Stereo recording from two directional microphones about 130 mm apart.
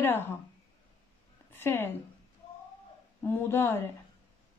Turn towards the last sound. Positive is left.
turn(degrees=20)  # may be behind; listen again after turning